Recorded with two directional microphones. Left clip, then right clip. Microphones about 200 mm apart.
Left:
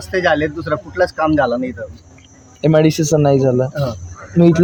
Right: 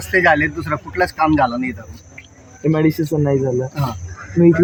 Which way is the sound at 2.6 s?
60° left (ahead or behind).